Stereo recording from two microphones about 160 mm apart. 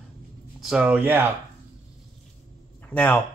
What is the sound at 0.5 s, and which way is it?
Speech, 5° right (ahead or behind).